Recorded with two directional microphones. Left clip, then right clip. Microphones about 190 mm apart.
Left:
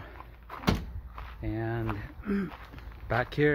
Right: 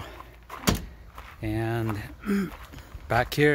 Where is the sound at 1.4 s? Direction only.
45° right (ahead or behind).